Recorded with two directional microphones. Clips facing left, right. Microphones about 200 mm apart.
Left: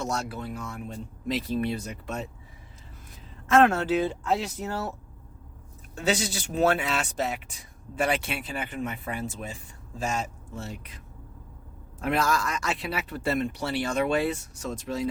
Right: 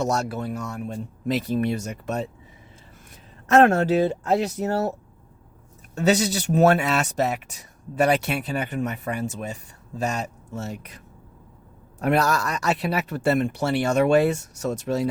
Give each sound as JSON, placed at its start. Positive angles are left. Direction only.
{"t": 0.1, "sound": "speech", "side_deg": -45}
{"t": 1.3, "sound": "speech", "side_deg": -55}
{"t": 3.5, "sound": "speech", "side_deg": -45}
{"t": 7.9, "sound": "speech", "side_deg": -40}
{"t": 11.9, "sound": "speech", "side_deg": -40}
{"t": 13.1, "sound": "speech", "side_deg": -70}
{"t": 13.6, "sound": "speech", "side_deg": -50}
{"t": 14.3, "sound": "speech", "side_deg": -70}